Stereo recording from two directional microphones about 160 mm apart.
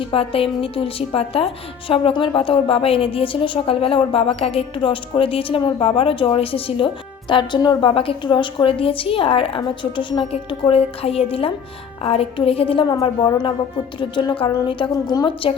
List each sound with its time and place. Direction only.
0.1 s a woman's voice: 35° left (ahead or behind)
14.0 s a woman's voice: 30° left (ahead or behind)